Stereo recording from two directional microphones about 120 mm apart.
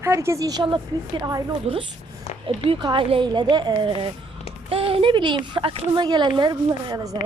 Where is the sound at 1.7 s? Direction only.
60° right (ahead or behind).